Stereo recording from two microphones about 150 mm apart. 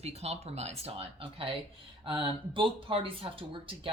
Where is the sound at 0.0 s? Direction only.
45° right (ahead or behind).